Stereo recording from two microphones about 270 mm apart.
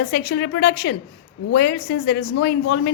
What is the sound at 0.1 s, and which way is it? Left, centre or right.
A woman's voice, left.